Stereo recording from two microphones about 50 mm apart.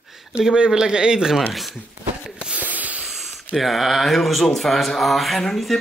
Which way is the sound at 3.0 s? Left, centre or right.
Centre.